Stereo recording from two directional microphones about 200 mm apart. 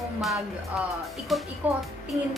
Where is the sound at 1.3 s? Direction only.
Centre (ahead or behind).